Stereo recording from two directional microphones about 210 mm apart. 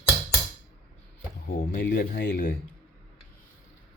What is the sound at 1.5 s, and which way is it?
Speech, 45° left (ahead or behind).